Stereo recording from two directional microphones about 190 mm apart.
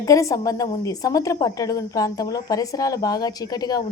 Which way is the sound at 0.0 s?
15° left (ahead or behind).